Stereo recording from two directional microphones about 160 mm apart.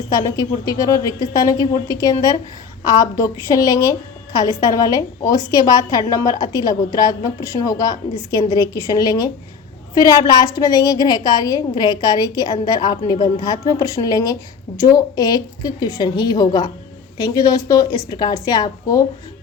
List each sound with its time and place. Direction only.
0.1 s a woman's voice: 25° left (ahead or behind)